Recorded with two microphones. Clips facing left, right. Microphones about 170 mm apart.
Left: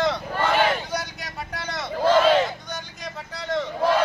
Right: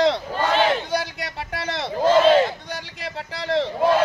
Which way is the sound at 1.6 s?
30° right (ahead or behind).